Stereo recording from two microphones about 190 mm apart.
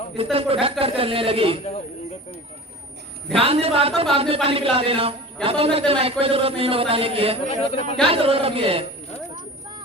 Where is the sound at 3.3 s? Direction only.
30° right (ahead or behind).